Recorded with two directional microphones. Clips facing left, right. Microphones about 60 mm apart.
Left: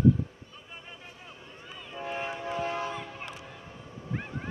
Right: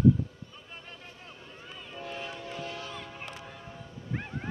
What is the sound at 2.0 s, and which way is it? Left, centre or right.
Train, left.